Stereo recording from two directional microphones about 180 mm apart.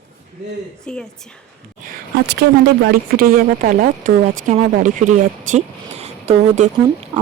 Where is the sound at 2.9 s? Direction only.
55° right (ahead or behind).